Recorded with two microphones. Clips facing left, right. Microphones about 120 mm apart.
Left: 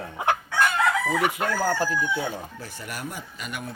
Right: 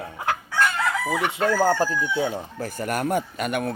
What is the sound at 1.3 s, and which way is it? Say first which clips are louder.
Speech: right 5 dB; 25° right (ahead or behind).